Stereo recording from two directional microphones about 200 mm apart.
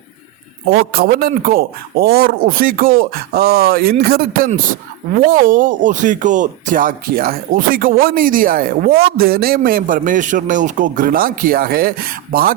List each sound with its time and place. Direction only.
0.7 s speech: 50° right (ahead or behind)